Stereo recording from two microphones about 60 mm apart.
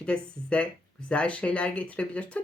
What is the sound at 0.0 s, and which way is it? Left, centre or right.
Speech, centre.